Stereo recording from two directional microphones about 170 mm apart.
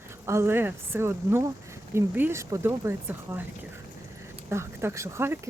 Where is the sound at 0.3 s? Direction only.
15° right (ahead or behind).